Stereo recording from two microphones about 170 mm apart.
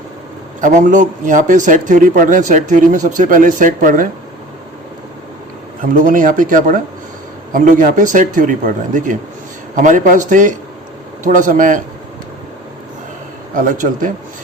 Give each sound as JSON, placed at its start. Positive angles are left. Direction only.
{"t": 0.6, "sound": "speech", "side_deg": -45}
{"t": 5.8, "sound": "speech", "side_deg": -55}
{"t": 13.5, "sound": "speech", "side_deg": -50}